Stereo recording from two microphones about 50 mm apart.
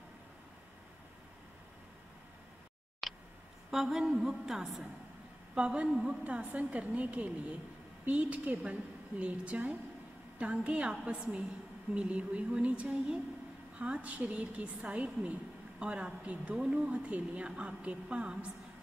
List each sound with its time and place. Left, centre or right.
3.0 s a sound: centre
3.7 s music: centre
5.5 s a woman's voice: centre